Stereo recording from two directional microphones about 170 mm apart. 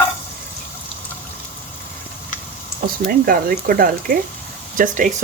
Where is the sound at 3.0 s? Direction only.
60° right (ahead or behind).